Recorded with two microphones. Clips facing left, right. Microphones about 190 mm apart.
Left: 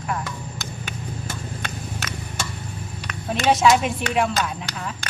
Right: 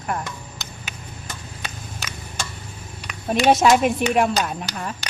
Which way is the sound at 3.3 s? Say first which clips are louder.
Right 2 dB; 50° right (ahead or behind).